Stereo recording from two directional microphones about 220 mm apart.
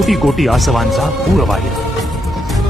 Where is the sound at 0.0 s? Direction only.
Centre (ahead or behind).